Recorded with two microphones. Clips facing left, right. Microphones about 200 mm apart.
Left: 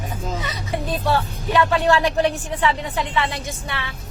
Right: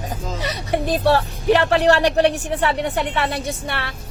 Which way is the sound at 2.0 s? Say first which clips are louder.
Right 3 dB; 75° right (ahead or behind).